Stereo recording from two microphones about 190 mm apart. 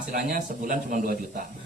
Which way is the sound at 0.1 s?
45° right (ahead or behind).